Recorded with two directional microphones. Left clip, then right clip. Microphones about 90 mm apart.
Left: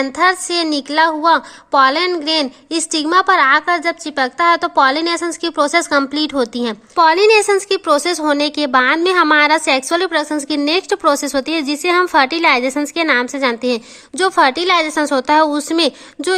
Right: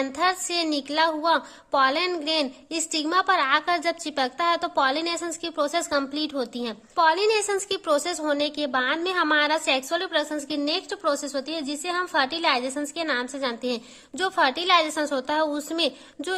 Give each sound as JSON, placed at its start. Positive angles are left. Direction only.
{"t": 0.0, "sound": "a woman's voice", "side_deg": 20}